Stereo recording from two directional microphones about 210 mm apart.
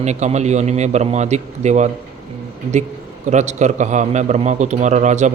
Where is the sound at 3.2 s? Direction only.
35° right (ahead or behind).